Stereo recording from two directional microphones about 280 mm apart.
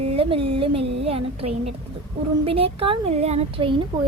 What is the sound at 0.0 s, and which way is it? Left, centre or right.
A woman's voice, centre.